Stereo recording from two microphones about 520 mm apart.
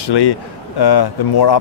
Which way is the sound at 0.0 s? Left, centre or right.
Left.